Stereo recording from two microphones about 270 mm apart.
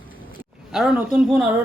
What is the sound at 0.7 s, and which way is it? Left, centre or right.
Speech, centre.